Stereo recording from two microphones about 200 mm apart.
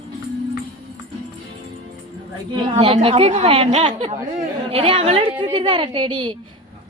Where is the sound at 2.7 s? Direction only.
30° right (ahead or behind).